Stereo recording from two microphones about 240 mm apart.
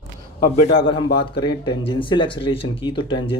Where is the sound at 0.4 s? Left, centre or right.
Left.